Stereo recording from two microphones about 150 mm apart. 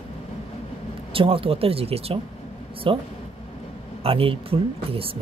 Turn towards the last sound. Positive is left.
turn(degrees=-40)  # may be behind; listen again after turning